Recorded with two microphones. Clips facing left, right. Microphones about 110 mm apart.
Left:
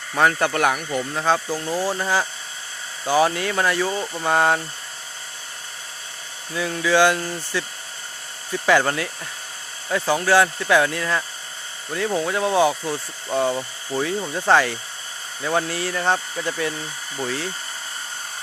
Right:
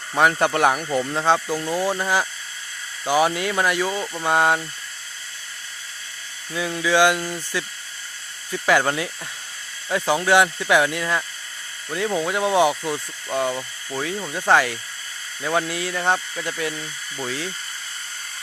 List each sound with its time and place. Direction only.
0.1 s speech: 15° right (ahead or behind)
4.0 s speech: centre (ahead or behind)
6.5 s speech: 10° right (ahead or behind)
8.6 s speech: 5° right (ahead or behind)
9.9 s speech: 15° right (ahead or behind)
13.2 s speech: centre (ahead or behind)
17.2 s speech: 10° left (ahead or behind)